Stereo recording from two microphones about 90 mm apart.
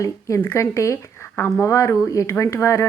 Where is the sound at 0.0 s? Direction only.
35° left (ahead or behind).